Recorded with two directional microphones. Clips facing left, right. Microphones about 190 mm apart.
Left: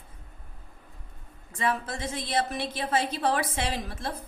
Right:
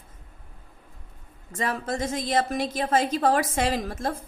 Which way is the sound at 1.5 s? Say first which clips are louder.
Right 1 dB; 40° right (ahead or behind).